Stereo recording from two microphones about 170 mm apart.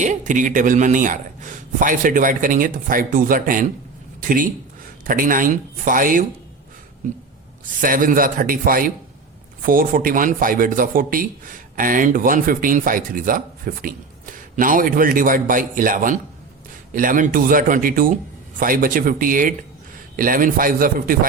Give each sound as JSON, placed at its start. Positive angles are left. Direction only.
{"t": 0.0, "sound": "a man's voice", "side_deg": -45}
{"t": 7.8, "sound": "a man's voice", "side_deg": -55}